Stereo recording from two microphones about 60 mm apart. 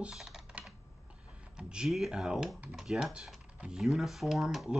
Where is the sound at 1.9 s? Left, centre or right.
Centre.